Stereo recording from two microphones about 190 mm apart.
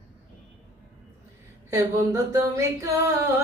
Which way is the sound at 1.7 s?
15° right (ahead or behind).